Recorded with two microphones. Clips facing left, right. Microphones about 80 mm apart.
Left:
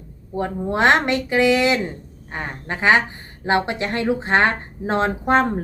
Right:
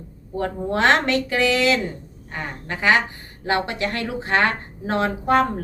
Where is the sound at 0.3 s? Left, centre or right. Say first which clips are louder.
Left 1 dB; left.